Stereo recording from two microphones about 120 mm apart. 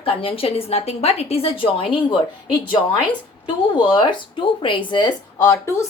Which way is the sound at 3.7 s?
40° left (ahead or behind).